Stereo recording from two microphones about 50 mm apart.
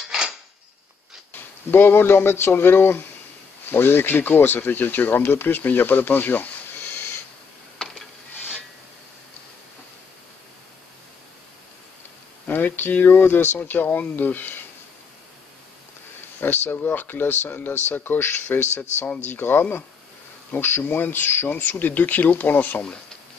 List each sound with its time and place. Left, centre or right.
0.0 s a sound: centre
1.7 s speech: left
12.4 s speech: left
16.3 s speech: left